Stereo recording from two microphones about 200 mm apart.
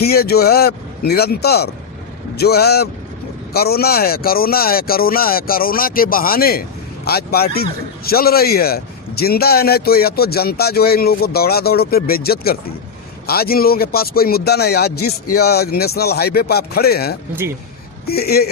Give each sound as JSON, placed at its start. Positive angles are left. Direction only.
{"t": 0.0, "sound": "a man's voice", "side_deg": 50}